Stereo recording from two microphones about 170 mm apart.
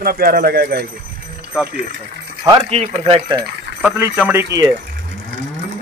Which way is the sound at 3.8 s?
10° right (ahead or behind).